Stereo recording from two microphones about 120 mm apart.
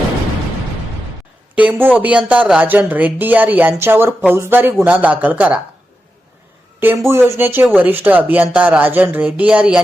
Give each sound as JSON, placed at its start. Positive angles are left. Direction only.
{"t": 1.5, "sound": "speech", "side_deg": -15}
{"t": 6.7, "sound": "speech", "side_deg": -20}